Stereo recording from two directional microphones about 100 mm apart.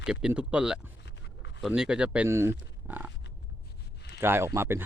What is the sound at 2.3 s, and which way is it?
Speech, 25° right (ahead or behind).